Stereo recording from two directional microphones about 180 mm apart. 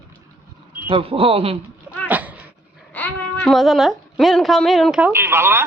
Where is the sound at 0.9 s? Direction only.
30° right (ahead or behind).